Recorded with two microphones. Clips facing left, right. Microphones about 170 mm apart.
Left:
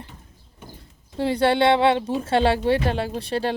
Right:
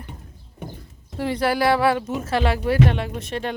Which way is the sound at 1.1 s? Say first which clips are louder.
Left 2 dB; 30° left (ahead or behind).